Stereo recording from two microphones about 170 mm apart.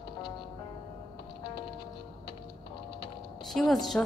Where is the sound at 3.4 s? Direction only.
Centre (ahead or behind).